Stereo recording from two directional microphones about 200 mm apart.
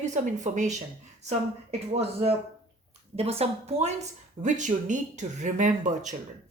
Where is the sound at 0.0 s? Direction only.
35° right (ahead or behind).